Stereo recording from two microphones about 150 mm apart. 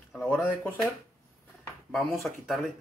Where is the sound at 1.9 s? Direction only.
Centre (ahead or behind).